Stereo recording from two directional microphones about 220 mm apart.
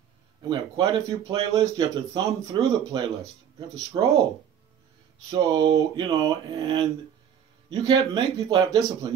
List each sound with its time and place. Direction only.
0.4 s speech: 15° right (ahead or behind)
5.3 s speech: 25° right (ahead or behind)